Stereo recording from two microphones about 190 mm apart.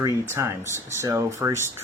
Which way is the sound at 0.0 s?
15° right (ahead or behind).